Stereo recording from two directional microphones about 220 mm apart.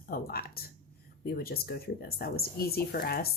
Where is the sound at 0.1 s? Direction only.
45° left (ahead or behind).